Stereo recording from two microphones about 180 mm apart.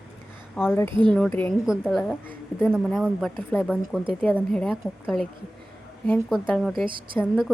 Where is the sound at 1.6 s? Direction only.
5° right (ahead or behind).